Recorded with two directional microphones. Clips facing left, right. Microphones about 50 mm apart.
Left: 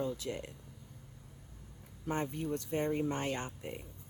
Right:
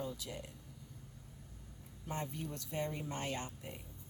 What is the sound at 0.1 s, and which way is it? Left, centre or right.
Speech, left.